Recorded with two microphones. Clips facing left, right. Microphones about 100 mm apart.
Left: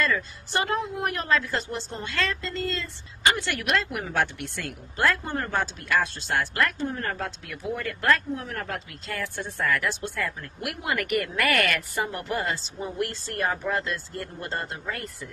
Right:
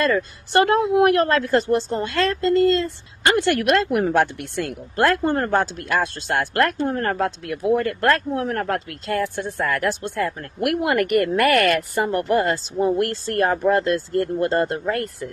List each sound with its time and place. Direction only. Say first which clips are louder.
0.0 s a woman's voice: right 6 dB; 60° right (ahead or behind)